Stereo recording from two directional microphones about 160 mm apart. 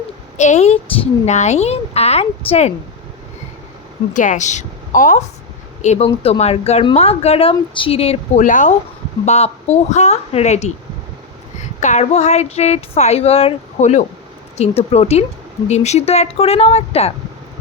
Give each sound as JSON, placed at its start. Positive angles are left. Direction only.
{"t": 0.3, "sound": "a woman's voice", "side_deg": 45}
{"t": 4.1, "sound": "a woman's voice", "side_deg": 50}
{"t": 5.8, "sound": "a woman's voice", "side_deg": 45}
{"t": 8.4, "sound": "speech", "side_deg": 55}
{"t": 11.8, "sound": "a woman's voice", "side_deg": 45}